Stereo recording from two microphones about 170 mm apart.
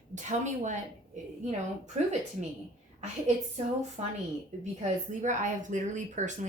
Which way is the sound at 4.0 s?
40° right (ahead or behind).